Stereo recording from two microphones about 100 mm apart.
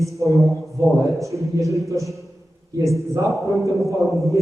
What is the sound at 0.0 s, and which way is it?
Speech, 30° right (ahead or behind).